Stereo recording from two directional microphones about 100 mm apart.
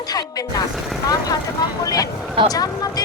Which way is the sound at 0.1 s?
40° left (ahead or behind).